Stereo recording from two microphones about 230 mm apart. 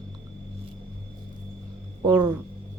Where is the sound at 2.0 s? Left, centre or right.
Centre.